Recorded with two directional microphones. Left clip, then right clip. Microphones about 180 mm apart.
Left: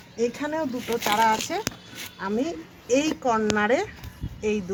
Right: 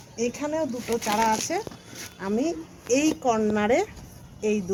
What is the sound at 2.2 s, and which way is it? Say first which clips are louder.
Speech: right 1 dB; 30° right (ahead or behind).